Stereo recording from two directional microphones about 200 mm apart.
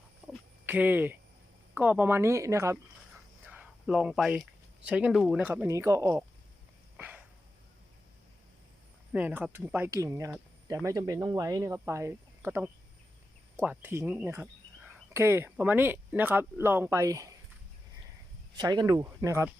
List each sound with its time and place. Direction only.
0.6 s speech: 10° right (ahead or behind)
3.4 s a sound: 5° right (ahead or behind)
4.9 s speech: 5° right (ahead or behind)
6.9 s a sound: 5° right (ahead or behind)
9.1 s speech: 5° right (ahead or behind)
18.5 s speech: 20° right (ahead or behind)